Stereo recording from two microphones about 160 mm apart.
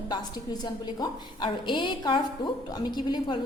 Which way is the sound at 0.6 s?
25° left (ahead or behind).